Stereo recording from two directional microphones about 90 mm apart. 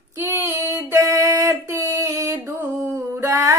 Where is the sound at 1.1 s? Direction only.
40° right (ahead or behind).